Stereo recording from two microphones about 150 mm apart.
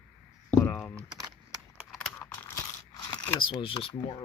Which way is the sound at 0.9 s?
25° right (ahead or behind).